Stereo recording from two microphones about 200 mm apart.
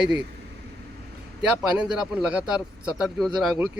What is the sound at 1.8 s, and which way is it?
Speech, 5° right (ahead or behind).